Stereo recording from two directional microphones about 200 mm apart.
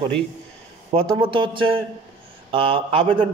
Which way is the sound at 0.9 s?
25° right (ahead or behind).